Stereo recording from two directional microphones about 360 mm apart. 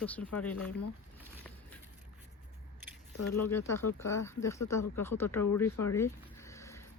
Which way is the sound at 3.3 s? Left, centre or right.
Centre.